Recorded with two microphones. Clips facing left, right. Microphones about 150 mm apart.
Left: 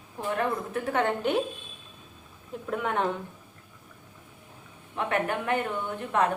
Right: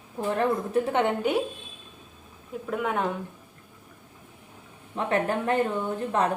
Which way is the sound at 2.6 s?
5° right (ahead or behind).